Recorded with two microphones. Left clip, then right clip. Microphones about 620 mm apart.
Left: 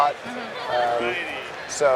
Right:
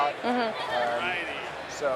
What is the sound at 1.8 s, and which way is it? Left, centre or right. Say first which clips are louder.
Speech: left 9 dB; left.